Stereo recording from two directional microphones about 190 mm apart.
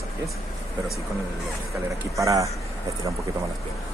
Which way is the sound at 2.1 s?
15° right (ahead or behind).